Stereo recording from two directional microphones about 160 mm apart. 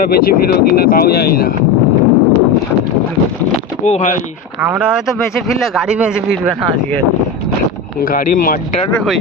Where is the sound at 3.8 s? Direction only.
50° left (ahead or behind).